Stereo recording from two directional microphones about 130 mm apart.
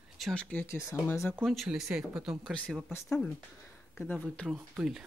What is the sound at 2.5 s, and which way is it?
Speech, 5° left (ahead or behind).